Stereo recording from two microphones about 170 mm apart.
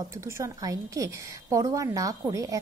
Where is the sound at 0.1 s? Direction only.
15° right (ahead or behind).